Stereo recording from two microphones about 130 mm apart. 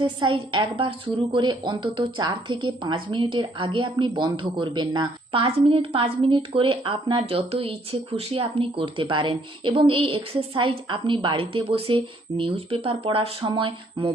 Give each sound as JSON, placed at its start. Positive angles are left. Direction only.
{"t": 0.0, "sound": "a woman's voice", "side_deg": -40}